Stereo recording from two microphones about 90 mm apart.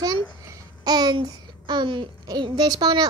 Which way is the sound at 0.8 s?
50° right (ahead or behind).